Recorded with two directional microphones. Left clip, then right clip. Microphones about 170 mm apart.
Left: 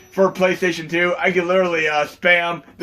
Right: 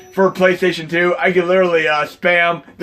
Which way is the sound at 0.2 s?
35° right (ahead or behind).